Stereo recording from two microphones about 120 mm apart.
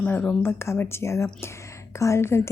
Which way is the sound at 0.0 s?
10° left (ahead or behind).